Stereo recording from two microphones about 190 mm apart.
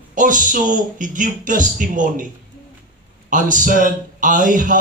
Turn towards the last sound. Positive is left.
turn(degrees=-45)  # may be behind; listen again after turning